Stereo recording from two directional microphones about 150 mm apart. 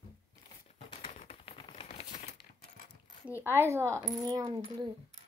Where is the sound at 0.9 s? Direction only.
40° left (ahead or behind).